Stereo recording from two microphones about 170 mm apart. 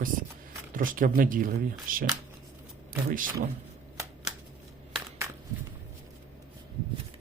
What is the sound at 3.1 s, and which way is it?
Speech, 55° right (ahead or behind).